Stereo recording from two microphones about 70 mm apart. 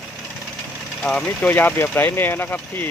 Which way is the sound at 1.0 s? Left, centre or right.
Centre.